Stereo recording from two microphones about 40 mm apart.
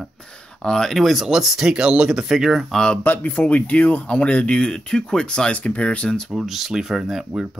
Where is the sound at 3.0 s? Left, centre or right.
Left.